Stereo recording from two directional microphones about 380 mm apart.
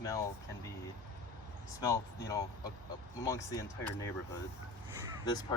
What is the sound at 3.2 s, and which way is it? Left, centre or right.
Speech, centre.